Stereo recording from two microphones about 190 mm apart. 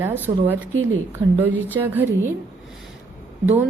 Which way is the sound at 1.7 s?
10° right (ahead or behind).